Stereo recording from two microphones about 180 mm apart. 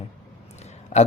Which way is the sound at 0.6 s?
40° left (ahead or behind).